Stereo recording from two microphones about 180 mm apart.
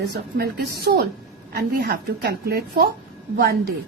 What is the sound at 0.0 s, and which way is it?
A woman's voice, 60° right (ahead or behind).